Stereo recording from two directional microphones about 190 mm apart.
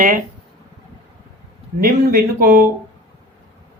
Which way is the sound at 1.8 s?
50° right (ahead or behind).